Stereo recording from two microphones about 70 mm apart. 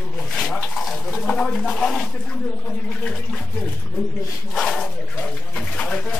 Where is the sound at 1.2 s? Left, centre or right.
Centre.